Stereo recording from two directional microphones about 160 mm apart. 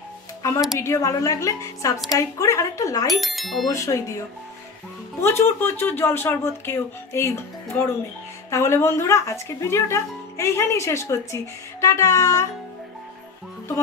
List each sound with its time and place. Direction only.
0.7 s a woman's voice: 15° left (ahead or behind)
3.1 s speech: centre (ahead or behind)
3.6 s a woman's voice: 20° left (ahead or behind)
5.2 s a woman's voice: 15° left (ahead or behind)